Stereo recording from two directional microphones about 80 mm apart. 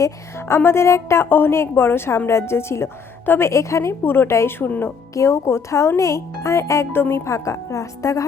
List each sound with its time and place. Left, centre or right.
0.0 s a woman's voice: left
5.1 s a woman's voice: left